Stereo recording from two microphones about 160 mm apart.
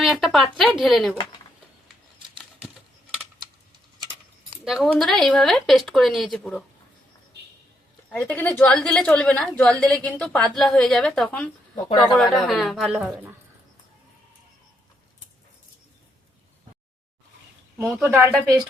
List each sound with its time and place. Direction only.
0.0 s a woman's voice: centre (ahead or behind)
4.6 s a woman's voice: centre (ahead or behind)
8.1 s a woman's voice: 10° left (ahead or behind)
11.8 s speech: 30° left (ahead or behind)
12.1 s a woman's voice: centre (ahead or behind)
18.0 s speech: 10° right (ahead or behind)